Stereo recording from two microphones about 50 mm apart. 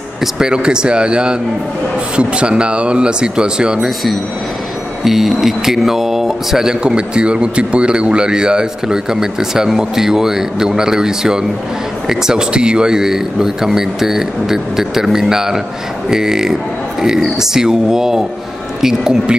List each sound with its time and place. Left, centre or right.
0.2 s speech: centre
5.0 s speech: centre